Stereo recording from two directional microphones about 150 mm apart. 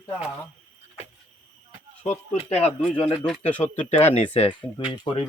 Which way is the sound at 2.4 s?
45° left (ahead or behind).